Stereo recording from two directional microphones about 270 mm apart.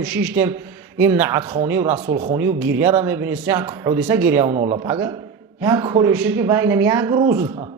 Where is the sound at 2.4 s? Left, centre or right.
Centre.